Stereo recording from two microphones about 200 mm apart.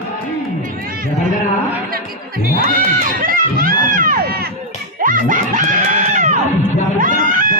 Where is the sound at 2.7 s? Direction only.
45° right (ahead or behind).